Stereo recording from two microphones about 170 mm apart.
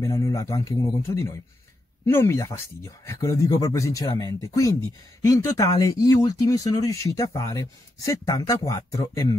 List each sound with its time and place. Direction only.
0.0 s speech: 20° left (ahead or behind)